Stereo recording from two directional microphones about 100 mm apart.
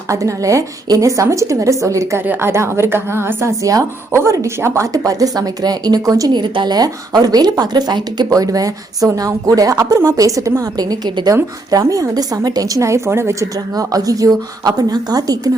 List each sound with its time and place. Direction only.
0.1 s a woman's voice: 35° right (ahead or behind)
2.2 s a woman's voice: 20° right (ahead or behind); by 15.4 s 40° right (ahead or behind)